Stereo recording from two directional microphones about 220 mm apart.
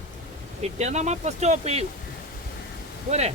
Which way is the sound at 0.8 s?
30° right (ahead or behind).